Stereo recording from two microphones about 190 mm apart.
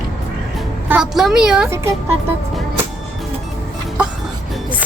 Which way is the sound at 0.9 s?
5° right (ahead or behind).